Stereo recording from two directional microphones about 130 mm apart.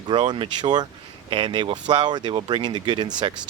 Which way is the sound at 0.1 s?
35° right (ahead or behind).